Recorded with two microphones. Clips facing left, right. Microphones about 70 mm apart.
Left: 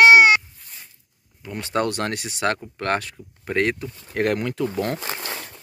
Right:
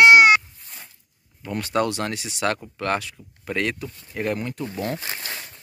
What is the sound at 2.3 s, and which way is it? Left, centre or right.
Speech, left.